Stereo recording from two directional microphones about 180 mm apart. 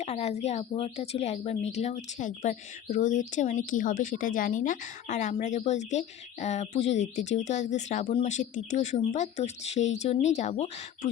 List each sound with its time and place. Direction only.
0.0 s a woman's voice: 35° left (ahead or behind)